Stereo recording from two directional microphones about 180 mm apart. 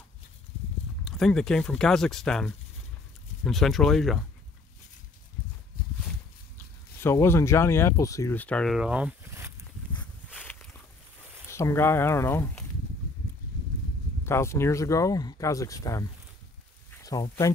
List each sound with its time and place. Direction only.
1.0 s speech: centre (ahead or behind)
7.0 s speech: 15° left (ahead or behind); by 9.5 s 10° right (ahead or behind)
9.9 s a sound: 10° left (ahead or behind)
11.5 s speech: 15° left (ahead or behind)
14.2 s speech: 15° left (ahead or behind)